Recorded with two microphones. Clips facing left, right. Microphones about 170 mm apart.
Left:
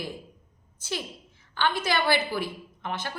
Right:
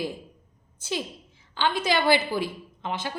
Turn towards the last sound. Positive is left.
turn(degrees=-15)  # may be behind; listen again after turning